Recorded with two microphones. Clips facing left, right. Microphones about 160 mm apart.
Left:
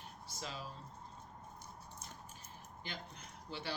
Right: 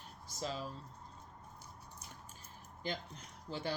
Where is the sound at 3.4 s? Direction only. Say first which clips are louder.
Right 4 dB; 40° right (ahead or behind).